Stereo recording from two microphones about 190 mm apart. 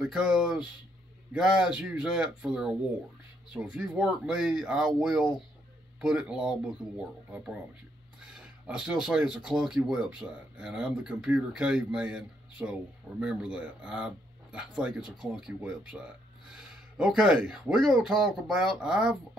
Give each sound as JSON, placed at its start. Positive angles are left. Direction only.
{"t": 0.0, "sound": "speech", "side_deg": -5}